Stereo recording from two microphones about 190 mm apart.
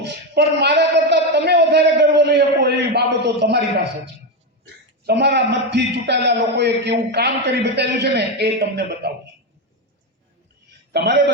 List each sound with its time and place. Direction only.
0.0 s a sound: 65° right (ahead or behind)
5.0 s a man's voice: 65° right (ahead or behind)
10.9 s a man's voice: 65° right (ahead or behind)